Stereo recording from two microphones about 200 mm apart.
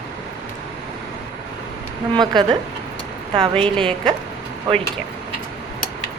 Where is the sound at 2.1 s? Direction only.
20° right (ahead or behind).